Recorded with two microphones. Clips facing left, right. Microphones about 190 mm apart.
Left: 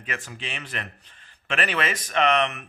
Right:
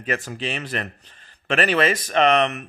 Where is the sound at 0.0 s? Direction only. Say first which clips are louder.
Right 8 dB; 40° right (ahead or behind).